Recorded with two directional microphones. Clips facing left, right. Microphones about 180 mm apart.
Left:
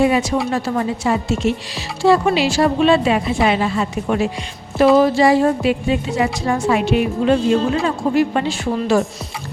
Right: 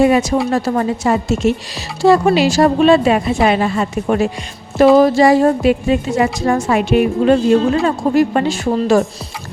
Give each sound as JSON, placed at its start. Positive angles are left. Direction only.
{"t": 0.0, "sound": "speech", "side_deg": -45}